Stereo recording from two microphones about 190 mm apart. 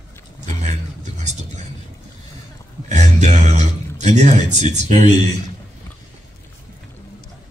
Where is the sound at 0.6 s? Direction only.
40° right (ahead or behind).